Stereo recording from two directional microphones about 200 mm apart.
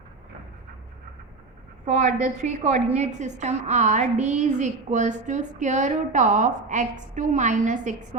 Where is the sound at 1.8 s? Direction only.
35° right (ahead or behind).